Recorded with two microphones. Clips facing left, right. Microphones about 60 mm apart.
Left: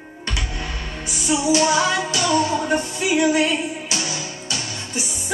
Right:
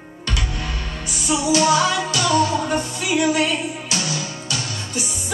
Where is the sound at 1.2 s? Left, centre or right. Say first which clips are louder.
Even; left.